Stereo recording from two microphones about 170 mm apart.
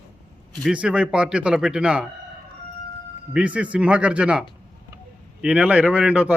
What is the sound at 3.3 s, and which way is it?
Speech, 5° right (ahead or behind).